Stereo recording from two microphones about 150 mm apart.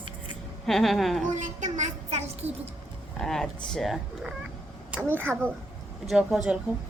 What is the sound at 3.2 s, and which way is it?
A woman's voice, 5° left (ahead or behind).